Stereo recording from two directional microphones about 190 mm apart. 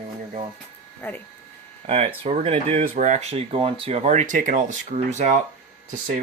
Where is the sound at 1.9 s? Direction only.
35° right (ahead or behind).